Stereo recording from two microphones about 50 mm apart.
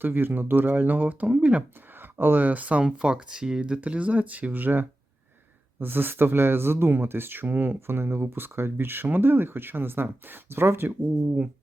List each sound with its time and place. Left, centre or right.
0.0 s speech: right
2.0 s speech: right
2.8 s speech: centre; by 7.8 s right
7.8 s speech: right